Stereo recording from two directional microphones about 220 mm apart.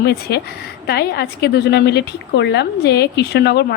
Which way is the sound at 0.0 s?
45° left (ahead or behind).